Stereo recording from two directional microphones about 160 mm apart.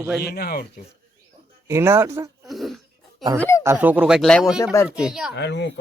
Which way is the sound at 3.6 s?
15° right (ahead or behind).